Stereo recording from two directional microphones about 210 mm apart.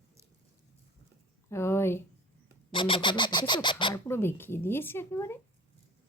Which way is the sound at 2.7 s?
25° left (ahead or behind).